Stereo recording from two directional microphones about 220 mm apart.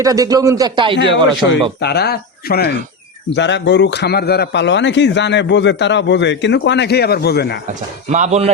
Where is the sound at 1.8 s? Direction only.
50° left (ahead or behind).